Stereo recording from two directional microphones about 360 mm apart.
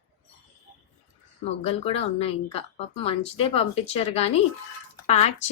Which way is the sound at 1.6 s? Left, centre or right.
Centre.